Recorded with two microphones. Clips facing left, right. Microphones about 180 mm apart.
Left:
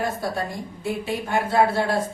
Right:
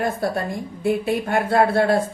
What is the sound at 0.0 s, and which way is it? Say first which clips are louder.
A woman's voice: right 3 dB; 55° right (ahead or behind).